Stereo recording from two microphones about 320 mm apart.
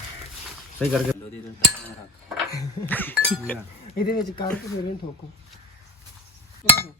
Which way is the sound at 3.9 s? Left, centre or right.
Left.